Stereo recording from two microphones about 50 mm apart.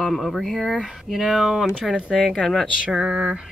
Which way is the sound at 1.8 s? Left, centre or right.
Centre.